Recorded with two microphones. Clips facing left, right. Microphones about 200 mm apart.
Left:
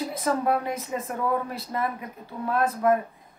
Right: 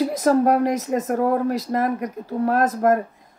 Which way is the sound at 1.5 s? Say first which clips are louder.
Right 8 dB; 90° right.